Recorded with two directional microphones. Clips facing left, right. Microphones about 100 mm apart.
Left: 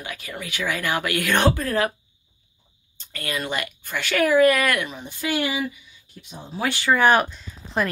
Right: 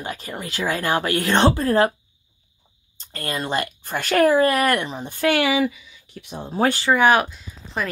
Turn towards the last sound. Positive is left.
turn(degrees=-5)  # may be behind; listen again after turning